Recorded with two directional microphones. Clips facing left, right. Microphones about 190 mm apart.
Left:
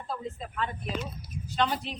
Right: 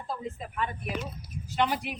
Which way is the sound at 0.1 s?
15° right (ahead or behind).